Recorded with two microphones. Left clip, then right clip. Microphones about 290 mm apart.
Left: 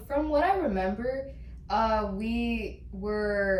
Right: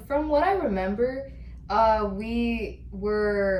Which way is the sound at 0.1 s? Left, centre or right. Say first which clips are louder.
Right 3 dB; centre.